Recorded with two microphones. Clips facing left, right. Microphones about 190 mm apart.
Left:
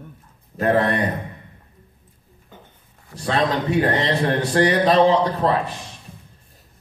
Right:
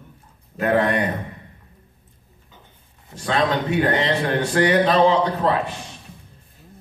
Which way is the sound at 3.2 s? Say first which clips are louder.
Even; 35° left (ahead or behind).